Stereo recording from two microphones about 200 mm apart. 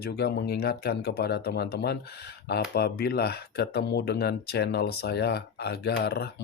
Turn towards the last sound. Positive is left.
turn(degrees=50)  # may be behind; listen again after turning